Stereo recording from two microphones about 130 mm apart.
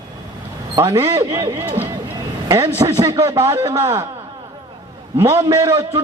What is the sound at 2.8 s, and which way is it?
Speech, 25° right (ahead or behind).